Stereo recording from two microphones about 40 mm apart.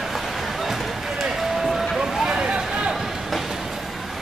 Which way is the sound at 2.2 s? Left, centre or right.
Right.